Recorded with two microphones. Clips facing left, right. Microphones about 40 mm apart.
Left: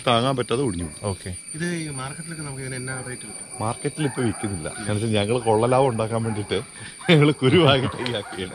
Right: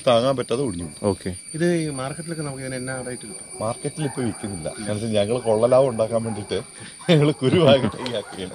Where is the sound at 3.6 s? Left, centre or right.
Left.